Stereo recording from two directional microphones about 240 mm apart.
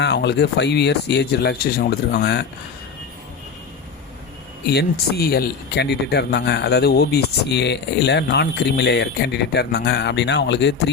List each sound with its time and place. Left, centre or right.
0.0 s speech: left
4.6 s speech: left